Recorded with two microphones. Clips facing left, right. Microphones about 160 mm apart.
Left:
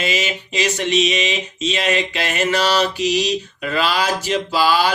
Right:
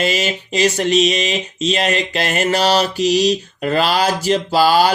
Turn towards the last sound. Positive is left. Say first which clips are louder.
# right 4 dB
turn(degrees=-40)  # may be behind; listen again after turning